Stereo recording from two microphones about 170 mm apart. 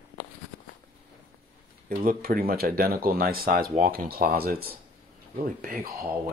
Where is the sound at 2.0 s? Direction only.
55° right (ahead or behind).